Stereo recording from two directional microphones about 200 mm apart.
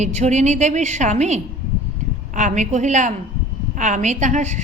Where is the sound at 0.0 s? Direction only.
35° right (ahead or behind).